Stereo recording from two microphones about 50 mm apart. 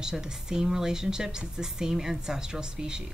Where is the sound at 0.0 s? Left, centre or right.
Centre.